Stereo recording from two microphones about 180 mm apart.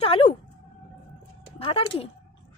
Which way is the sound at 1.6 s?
30° left (ahead or behind).